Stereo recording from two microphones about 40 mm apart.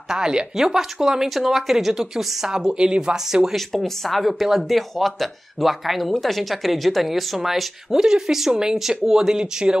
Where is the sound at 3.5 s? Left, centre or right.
Centre.